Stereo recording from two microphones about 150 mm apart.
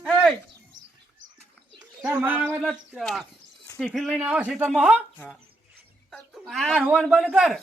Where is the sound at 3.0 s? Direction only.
Centre (ahead or behind).